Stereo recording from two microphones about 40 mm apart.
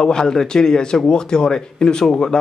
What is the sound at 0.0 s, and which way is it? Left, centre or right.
Speech, centre.